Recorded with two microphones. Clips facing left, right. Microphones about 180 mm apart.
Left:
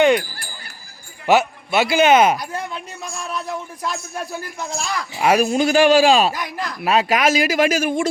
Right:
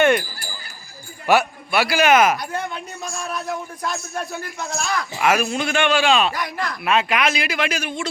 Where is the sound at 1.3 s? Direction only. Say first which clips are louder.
Left 2 dB; 20° left (ahead or behind).